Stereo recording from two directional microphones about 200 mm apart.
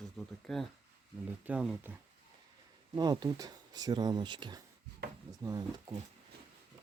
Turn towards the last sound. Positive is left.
turn(degrees=-20)  # may be behind; listen again after turning